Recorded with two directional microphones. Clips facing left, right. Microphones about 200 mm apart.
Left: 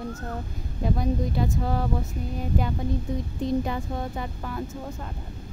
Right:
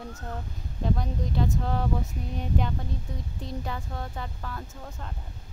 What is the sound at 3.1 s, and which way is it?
Speech, 20° left (ahead or behind).